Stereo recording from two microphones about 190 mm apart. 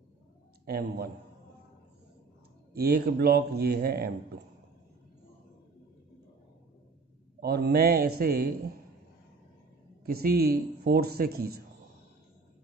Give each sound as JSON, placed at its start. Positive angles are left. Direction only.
{"t": 0.7, "sound": "speech", "side_deg": -55}
{"t": 2.7, "sound": "speech", "side_deg": -55}
{"t": 7.3, "sound": "speech", "side_deg": -55}
{"t": 10.0, "sound": "speech", "side_deg": -50}